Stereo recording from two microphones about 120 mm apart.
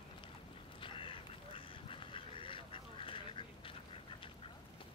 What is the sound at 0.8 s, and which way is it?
Duck, 45° left (ahead or behind).